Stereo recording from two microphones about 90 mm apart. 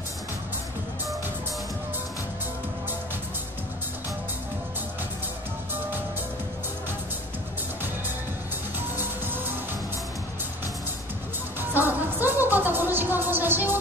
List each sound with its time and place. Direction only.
8.9 s music: 25° right (ahead or behind)
11.7 s music: 20° right (ahead or behind)